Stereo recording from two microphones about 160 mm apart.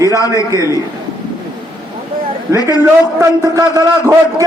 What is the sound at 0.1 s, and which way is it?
Speech, 20° left (ahead or behind).